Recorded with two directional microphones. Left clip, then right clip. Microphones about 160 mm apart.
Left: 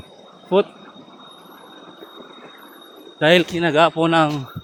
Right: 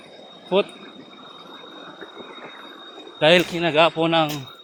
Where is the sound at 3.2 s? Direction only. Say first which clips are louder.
Left 1 dB; 55° left (ahead or behind).